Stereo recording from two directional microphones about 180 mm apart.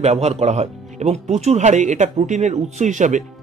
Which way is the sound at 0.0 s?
35° right (ahead or behind).